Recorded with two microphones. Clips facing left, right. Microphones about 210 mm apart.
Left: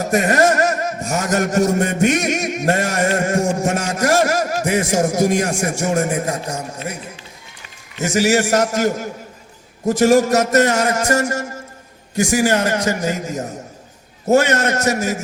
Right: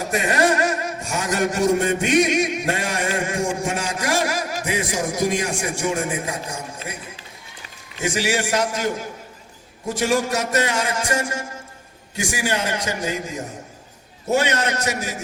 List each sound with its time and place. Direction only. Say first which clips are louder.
0.1 s a man's voice: left 4 dB; 45° left (ahead or behind)
7.9 s a man's voice: left 6 dB; 45° left (ahead or behind)